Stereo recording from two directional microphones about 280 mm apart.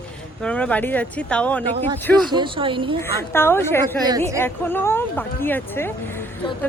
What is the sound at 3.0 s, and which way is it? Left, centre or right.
Speech, centre.